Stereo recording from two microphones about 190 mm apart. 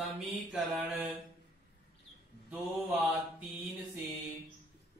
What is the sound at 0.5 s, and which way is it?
Mantra, 10° right (ahead or behind).